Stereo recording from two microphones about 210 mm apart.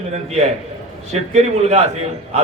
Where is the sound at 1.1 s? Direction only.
30° right (ahead or behind).